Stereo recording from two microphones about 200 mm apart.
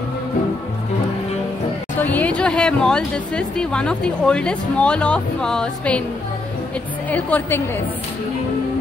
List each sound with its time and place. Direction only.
2.0 s speech: 5° left (ahead or behind)
7.1 s a woman's voice: 10° left (ahead or behind)